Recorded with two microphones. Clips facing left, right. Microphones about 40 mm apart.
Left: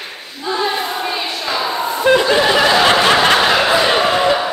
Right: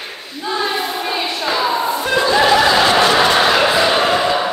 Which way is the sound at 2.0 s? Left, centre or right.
Centre.